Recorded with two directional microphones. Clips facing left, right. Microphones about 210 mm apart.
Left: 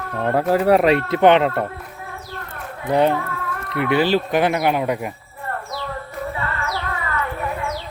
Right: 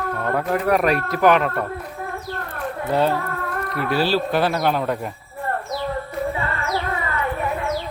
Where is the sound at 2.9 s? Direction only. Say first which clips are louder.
Left 3 dB; 15° left (ahead or behind).